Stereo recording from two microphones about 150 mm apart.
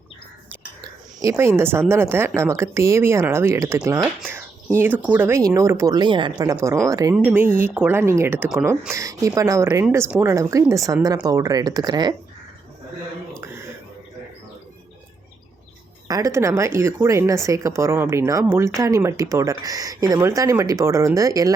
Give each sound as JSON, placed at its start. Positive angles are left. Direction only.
{"t": 0.8, "sound": "a sound", "side_deg": -20}
{"t": 1.9, "sound": "speech", "side_deg": -15}
{"t": 16.0, "sound": "speech", "side_deg": -20}